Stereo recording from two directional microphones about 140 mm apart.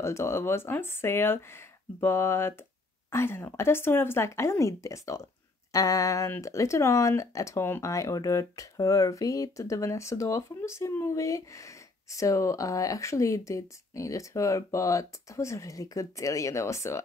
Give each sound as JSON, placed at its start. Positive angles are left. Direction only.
{"t": 0.0, "sound": "speech", "side_deg": 20}